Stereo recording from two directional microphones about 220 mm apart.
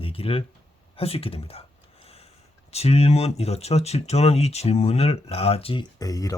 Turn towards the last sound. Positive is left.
turn(degrees=15)  # may be behind; listen again after turning